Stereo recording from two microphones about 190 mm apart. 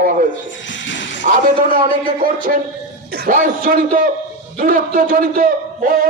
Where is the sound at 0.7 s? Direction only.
75° left (ahead or behind).